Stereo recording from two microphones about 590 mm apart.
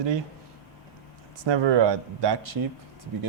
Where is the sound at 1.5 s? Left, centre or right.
Right.